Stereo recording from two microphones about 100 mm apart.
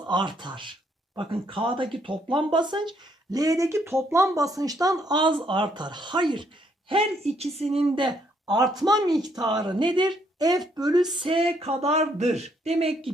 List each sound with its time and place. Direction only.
0.0 s speech: 50° right (ahead or behind)
3.3 s speech: 35° right (ahead or behind)
5.0 s speech: 50° right (ahead or behind); by 7.4 s 75° right (ahead or behind)
7.5 s speech: 90° right
7.9 s speech: 45° right (ahead or behind)
11.1 s speech: 55° right (ahead or behind); by 12.9 s 90° right